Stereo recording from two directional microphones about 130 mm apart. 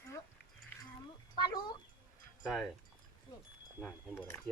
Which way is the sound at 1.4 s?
35° left (ahead or behind).